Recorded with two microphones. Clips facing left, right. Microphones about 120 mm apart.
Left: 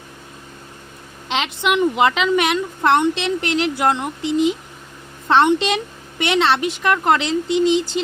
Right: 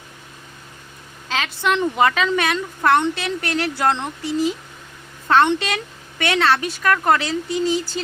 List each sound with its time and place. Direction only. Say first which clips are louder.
1.3 s a woman's voice: left 1 dB; 20° left (ahead or behind)